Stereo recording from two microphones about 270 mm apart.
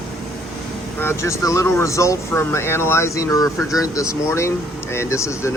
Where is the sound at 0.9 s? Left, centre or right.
Centre.